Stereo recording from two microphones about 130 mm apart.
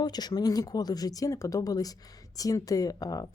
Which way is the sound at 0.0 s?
30° left (ahead or behind).